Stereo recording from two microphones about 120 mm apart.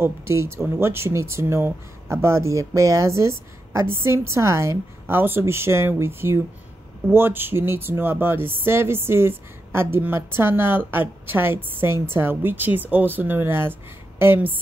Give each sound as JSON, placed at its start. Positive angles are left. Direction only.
{"t": 0.0, "sound": "a woman's voice", "side_deg": -20}